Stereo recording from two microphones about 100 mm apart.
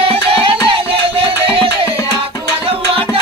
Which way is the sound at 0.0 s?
70° right (ahead or behind).